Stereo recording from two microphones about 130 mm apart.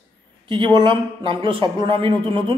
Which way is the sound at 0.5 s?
35° right (ahead or behind).